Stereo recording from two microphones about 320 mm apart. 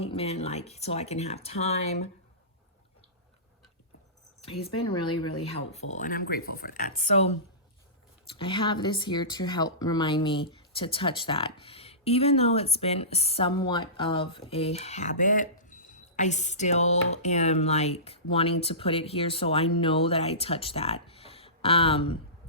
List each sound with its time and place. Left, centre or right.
0.0 s speech: centre
4.8 s speech: centre
8.4 s speech: centre